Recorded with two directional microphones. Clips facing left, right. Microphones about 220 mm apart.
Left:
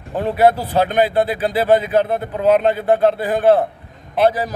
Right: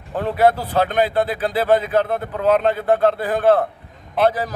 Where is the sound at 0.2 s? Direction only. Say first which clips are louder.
Left 2 dB; 10° left (ahead or behind).